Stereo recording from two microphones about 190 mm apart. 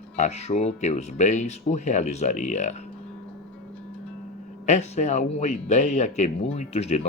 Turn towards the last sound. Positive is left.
turn(degrees=35)  # may be behind; listen again after turning